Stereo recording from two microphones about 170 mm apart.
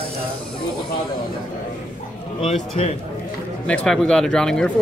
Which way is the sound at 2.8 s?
40° left (ahead or behind).